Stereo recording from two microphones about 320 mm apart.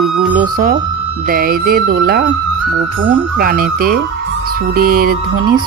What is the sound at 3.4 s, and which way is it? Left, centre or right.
Speech, right.